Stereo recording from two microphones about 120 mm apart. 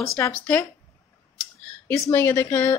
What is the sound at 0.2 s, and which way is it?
Speech, 15° left (ahead or behind).